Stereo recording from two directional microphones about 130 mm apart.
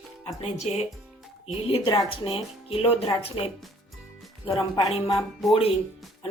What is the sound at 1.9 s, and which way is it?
Speech, 40° left (ahead or behind).